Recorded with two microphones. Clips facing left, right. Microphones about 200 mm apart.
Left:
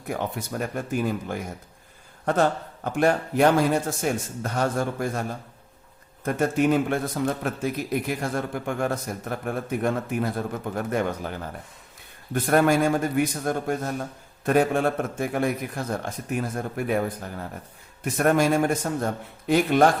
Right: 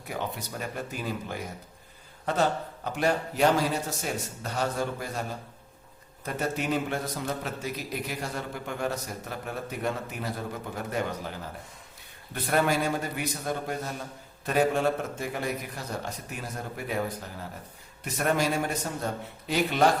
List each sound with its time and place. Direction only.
0.1 s a man's voice: 50° left (ahead or behind)
6.2 s a man's voice: 50° left (ahead or behind)